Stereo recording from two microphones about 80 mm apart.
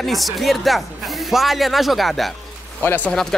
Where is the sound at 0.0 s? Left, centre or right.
Centre.